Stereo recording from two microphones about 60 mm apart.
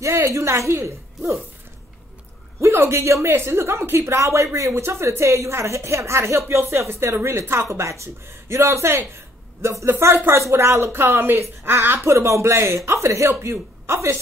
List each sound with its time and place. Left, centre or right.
0.0 s speech: right
2.6 s speech: right
4.2 s speech: right
6.8 s a woman's voice: right